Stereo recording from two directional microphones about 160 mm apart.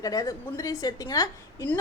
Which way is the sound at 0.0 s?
20° left (ahead or behind).